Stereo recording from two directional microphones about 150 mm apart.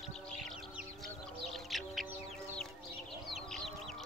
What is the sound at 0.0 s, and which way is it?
Music, centre (ahead or behind).